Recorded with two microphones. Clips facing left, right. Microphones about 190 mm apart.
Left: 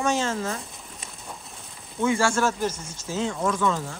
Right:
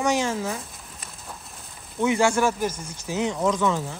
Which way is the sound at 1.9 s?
20° right (ahead or behind).